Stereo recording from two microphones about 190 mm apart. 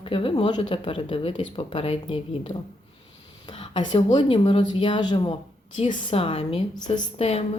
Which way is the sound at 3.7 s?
25° left (ahead or behind).